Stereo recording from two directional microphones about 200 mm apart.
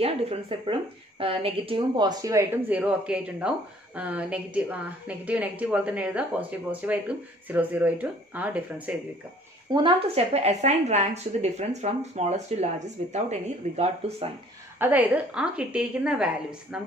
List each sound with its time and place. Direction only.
0.0 s a woman's voice: 30° right (ahead or behind); by 8.9 s 5° right (ahead or behind)
9.7 s a woman's voice: 25° right (ahead or behind)
14.8 s a woman's voice: 10° right (ahead or behind)